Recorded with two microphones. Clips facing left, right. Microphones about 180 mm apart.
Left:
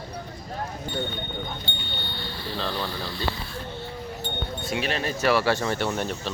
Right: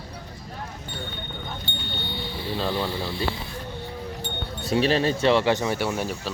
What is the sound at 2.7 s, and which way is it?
Speech, 25° right (ahead or behind).